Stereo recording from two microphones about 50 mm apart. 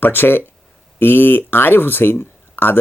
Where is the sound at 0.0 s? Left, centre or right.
Left.